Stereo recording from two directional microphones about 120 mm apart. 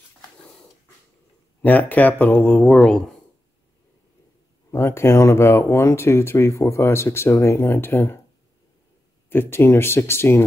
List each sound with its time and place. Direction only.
1.6 s speech: 15° left (ahead or behind)
4.6 s speech: 20° left (ahead or behind)
9.3 s speech: 20° left (ahead or behind)